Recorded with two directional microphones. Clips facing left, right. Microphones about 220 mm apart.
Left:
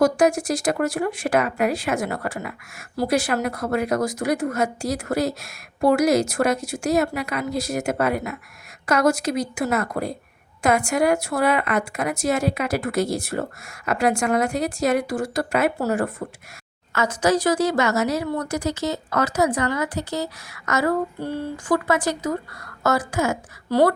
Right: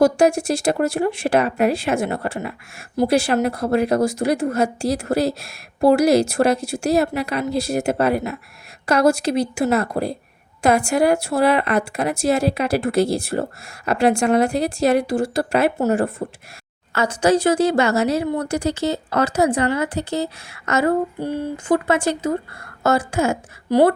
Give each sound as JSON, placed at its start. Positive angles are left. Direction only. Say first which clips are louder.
{"t": 0.0, "sound": "speech", "louder": "right 3 dB", "side_deg": -30}
{"t": 21.2, "sound": "a sound", "louder": "right 3 dB", "side_deg": -15}
{"t": 21.8, "sound": "speech", "louder": "right 3 dB", "side_deg": -30}